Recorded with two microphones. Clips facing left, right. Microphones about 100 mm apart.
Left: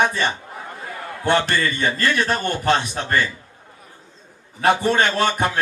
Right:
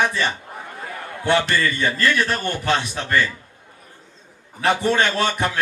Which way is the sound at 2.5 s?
45° left (ahead or behind).